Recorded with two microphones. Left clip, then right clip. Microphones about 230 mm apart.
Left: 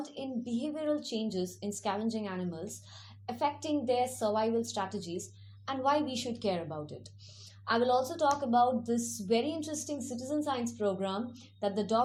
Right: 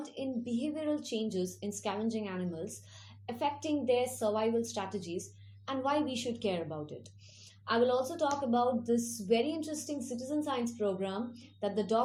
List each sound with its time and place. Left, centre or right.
0.0 s a woman's voice: centre